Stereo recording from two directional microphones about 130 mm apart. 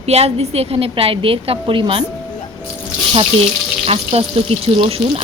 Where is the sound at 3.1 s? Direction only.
45° right (ahead or behind).